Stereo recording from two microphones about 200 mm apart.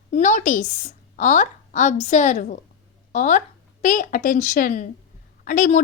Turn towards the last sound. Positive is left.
turn(degrees=40)  # may be behind; listen again after turning